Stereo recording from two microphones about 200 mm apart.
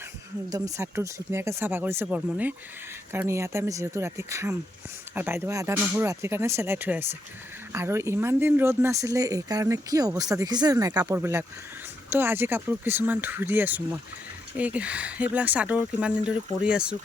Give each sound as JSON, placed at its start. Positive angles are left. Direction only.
{"t": 0.5, "sound": "speech", "side_deg": -15}